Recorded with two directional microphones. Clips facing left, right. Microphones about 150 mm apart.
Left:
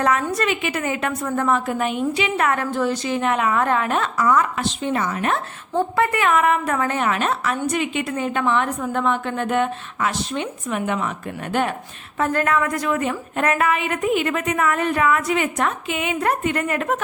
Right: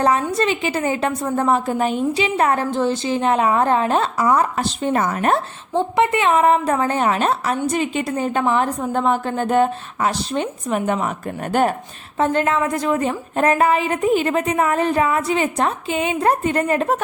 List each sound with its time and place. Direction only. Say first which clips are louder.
0.0 s a woman's voice: right 2 dB; 30° right (ahead or behind)
5.7 s a woman's voice: right 2 dB; 20° right (ahead or behind)
12.2 s a woman's voice: right 2 dB; 25° right (ahead or behind)